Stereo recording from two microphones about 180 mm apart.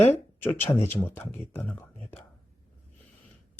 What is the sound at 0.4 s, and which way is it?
Speech, 15° left (ahead or behind).